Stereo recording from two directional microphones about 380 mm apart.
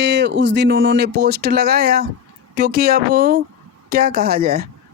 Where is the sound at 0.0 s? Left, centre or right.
Right.